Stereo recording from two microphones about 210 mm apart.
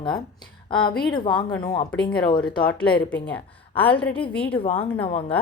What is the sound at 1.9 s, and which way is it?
Speech, 5° left (ahead or behind).